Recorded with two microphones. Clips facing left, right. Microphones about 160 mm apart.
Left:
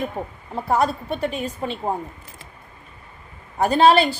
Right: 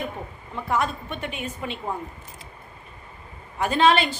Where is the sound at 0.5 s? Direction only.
35° left (ahead or behind).